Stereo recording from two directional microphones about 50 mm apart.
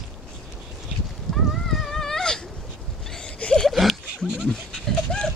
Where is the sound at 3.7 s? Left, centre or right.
Centre.